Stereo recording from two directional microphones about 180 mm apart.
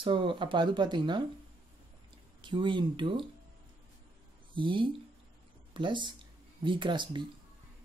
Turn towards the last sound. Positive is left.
turn(degrees=-25)  # may be behind; listen again after turning